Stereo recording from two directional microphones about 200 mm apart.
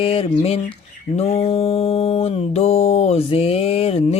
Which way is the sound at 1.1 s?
30° left (ahead or behind).